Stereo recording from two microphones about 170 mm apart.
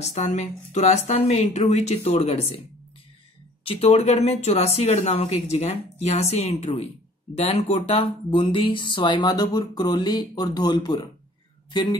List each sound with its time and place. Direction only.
0.0 s speech: 45° left (ahead or behind)
3.6 s speech: 35° left (ahead or behind)